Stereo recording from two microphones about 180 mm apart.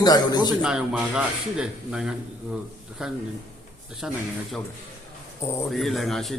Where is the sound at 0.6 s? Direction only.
5° right (ahead or behind).